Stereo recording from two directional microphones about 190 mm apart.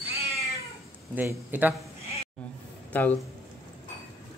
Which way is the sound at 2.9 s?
10° left (ahead or behind).